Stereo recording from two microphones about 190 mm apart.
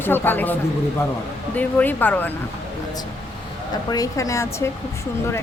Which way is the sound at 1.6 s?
10° left (ahead or behind).